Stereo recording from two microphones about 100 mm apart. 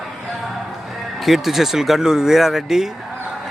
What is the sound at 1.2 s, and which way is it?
Speech, centre (ahead or behind).